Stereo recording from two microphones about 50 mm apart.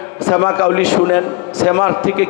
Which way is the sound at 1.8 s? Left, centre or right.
Left.